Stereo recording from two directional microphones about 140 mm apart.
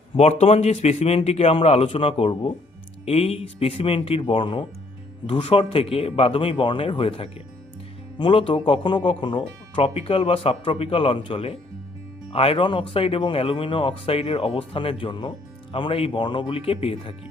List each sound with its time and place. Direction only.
0.2 s a man's voice: 50° left (ahead or behind)